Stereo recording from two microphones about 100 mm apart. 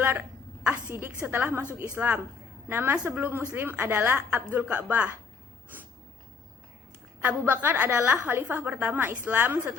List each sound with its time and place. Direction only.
0.6 s a woman's voice: 15° right (ahead or behind)
7.2 s a woman's voice: 20° right (ahead or behind)